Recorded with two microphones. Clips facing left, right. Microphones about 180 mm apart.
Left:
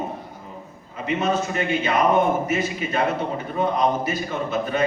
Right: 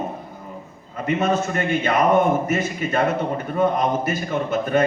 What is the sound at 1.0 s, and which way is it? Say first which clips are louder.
A man's voice: right 2 dB; 50° right (ahead or behind).